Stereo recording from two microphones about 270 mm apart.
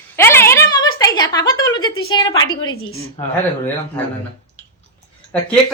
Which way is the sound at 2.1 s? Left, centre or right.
Centre.